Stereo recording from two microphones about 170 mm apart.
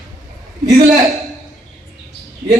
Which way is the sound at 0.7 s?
20° right (ahead or behind).